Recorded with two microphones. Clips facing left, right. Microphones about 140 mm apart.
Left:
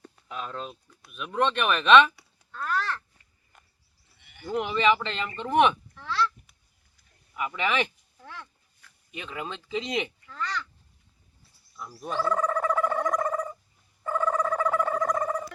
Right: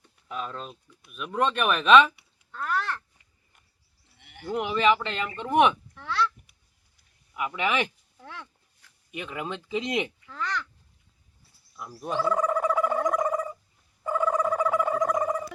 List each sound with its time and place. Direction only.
0.3 s speech: centre (ahead or behind)
2.5 s a sound: 15° right (ahead or behind)
4.2 s sheep: 75° right (ahead or behind)
4.5 s speech: 5° right (ahead or behind)
7.3 s speech: 10° right (ahead or behind)
11.8 s a sound: 10° right (ahead or behind)
15.1 s music: 10° right (ahead or behind)